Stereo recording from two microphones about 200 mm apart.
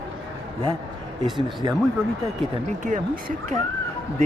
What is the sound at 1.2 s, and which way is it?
Speech, 20° right (ahead or behind).